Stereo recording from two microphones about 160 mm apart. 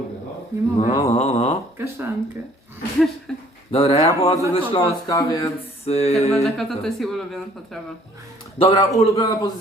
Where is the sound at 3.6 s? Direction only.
35° left (ahead or behind).